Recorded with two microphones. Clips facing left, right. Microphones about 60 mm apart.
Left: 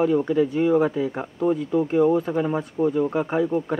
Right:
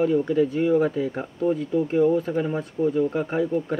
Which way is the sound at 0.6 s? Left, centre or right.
Centre.